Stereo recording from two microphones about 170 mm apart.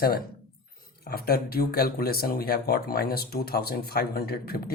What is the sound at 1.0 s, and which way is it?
Speech, 65° left (ahead or behind).